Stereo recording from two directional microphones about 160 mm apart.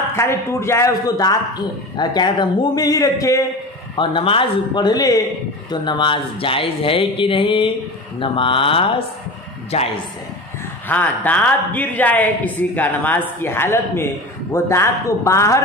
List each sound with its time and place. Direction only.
0.1 s a woman's voice: 15° left (ahead or behind)
3.9 s speech: 30° left (ahead or behind)
10.9 s a woman's voice: 10° left (ahead or behind)